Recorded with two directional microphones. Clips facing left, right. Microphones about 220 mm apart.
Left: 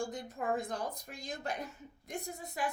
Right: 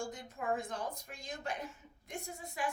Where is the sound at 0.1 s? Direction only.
35° left (ahead or behind).